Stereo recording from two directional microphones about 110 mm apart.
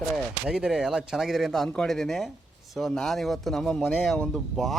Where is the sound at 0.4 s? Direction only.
5° right (ahead or behind).